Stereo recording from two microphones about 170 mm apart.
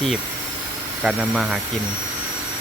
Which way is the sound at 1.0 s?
5° right (ahead or behind).